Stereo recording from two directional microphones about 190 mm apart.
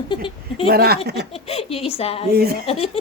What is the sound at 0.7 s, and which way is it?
Speech, 55° right (ahead or behind).